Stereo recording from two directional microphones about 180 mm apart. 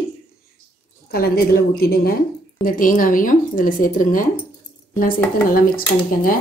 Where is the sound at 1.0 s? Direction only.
60° left (ahead or behind).